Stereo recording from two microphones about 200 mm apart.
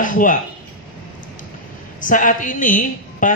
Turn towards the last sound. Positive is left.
turn(degrees=40)  # may be behind; listen again after turning